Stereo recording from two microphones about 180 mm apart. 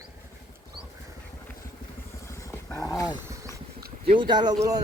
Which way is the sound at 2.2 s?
15° left (ahead or behind).